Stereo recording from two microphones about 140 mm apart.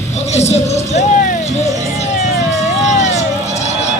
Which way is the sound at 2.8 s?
55° left (ahead or behind).